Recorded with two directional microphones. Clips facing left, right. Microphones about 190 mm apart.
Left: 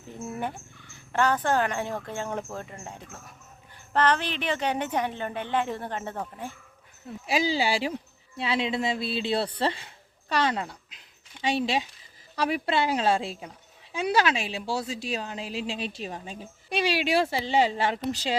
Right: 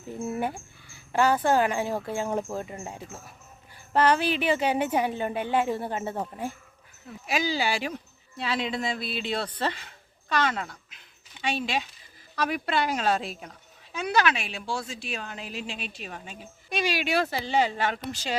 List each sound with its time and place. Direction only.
0.2 s speech: 10° right (ahead or behind)
7.3 s speech: 30° left (ahead or behind)
10.5 s speech: 15° left (ahead or behind)
12.5 s speech: 25° left (ahead or behind)